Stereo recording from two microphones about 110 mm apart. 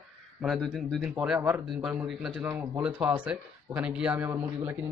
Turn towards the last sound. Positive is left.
turn(degrees=-15)  # may be behind; listen again after turning